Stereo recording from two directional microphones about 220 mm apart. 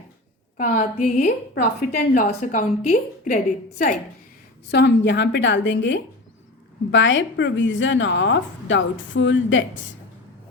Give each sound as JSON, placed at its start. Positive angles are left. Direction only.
{"t": 0.5, "sound": "a woman's voice", "side_deg": 40}
{"t": 4.7, "sound": "a woman's voice", "side_deg": 50}